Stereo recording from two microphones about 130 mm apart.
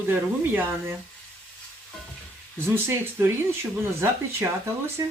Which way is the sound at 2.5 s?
20° right (ahead or behind).